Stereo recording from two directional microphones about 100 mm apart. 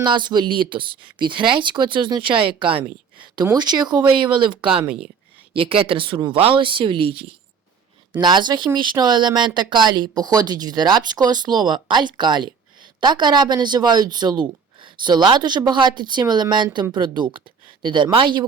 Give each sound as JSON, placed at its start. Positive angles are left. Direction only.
{"t": 0.0, "sound": "speech", "side_deg": -50}
{"t": 3.4, "sound": "speech", "side_deg": -45}
{"t": 5.5, "sound": "speech", "side_deg": -70}
{"t": 8.2, "sound": "speech", "side_deg": -50}